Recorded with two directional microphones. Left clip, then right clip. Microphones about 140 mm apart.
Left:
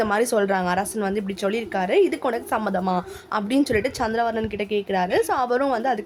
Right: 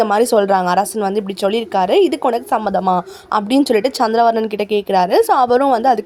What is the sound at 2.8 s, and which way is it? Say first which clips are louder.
A woman's voice: right 9 dB; 40° right (ahead or behind).